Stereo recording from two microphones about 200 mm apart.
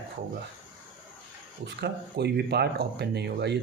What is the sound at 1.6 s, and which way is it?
Speech, 55° right (ahead or behind).